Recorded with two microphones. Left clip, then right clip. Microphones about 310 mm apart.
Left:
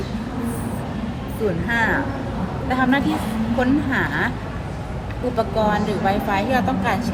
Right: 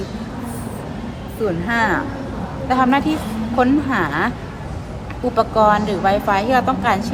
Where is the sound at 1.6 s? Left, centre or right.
Right.